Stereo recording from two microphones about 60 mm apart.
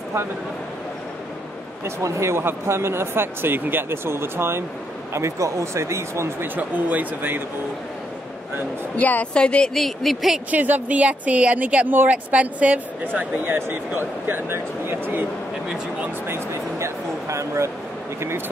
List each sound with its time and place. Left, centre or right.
2.0 s speech: right
5.1 s speech: right
6.4 s speech: right
8.9 s a woman's voice: left
9.8 s speech: centre
10.5 s a woman's voice: right
16.3 s a sound: right